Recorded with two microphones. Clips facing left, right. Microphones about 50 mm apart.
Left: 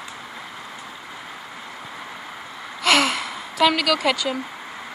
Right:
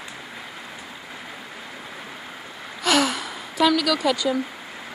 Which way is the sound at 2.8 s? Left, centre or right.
Left.